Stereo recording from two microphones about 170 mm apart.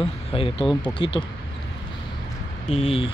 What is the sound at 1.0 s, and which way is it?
Speech, 30° left (ahead or behind).